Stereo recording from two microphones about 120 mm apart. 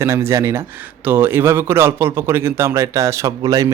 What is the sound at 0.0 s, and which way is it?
Speech, 20° right (ahead or behind).